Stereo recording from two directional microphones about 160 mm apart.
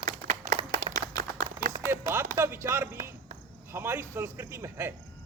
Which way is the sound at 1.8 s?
15° right (ahead or behind).